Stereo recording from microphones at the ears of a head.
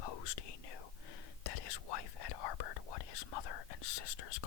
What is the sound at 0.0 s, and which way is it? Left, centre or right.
Whispering, left.